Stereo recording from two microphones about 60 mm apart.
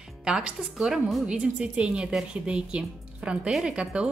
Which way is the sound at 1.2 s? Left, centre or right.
Centre.